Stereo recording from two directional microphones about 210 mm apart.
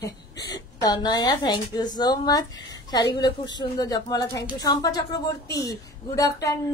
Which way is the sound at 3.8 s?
15° left (ahead or behind).